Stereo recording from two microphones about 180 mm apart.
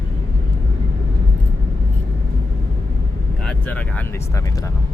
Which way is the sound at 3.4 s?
10° left (ahead or behind).